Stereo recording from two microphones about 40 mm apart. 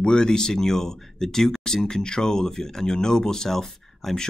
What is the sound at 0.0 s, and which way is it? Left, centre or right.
Speech, centre.